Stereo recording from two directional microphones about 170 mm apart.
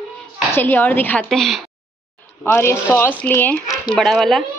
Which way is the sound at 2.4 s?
15° left (ahead or behind).